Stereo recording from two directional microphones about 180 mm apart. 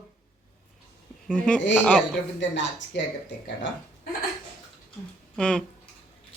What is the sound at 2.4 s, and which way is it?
Speech, 90° left.